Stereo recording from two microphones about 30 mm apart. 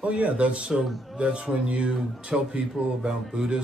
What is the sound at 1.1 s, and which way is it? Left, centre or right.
Speech, right.